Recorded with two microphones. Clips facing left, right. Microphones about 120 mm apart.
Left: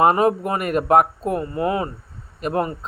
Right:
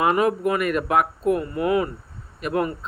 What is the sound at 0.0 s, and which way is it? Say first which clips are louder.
Speech: left 3 dB; 35° left (ahead or behind).